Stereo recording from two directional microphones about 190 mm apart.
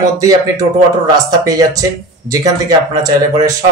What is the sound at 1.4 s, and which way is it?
Speech, 20° right (ahead or behind).